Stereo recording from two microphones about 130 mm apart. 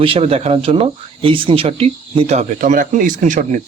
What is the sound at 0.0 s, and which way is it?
Speech, 45° right (ahead or behind).